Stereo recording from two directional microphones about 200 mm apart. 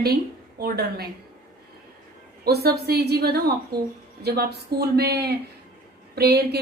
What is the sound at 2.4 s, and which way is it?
Speech, 50° right (ahead or behind).